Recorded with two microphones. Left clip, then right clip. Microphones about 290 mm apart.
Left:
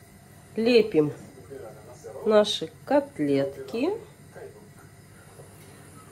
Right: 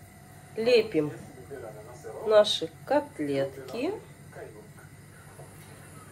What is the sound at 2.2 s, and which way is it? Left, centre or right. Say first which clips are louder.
Speech: even; left.